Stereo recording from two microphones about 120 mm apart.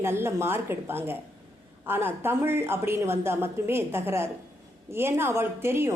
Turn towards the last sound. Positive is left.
turn(degrees=-20)  # may be behind; listen again after turning